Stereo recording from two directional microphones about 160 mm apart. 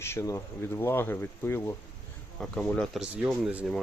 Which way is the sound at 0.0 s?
15° left (ahead or behind).